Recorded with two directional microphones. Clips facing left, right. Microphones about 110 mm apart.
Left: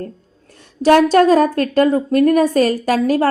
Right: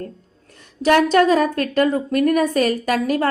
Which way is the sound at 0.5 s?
30° left (ahead or behind).